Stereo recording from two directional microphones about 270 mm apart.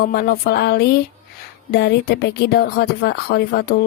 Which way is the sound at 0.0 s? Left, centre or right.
Left.